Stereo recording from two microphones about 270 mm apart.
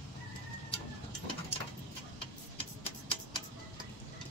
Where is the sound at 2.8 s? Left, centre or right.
Centre.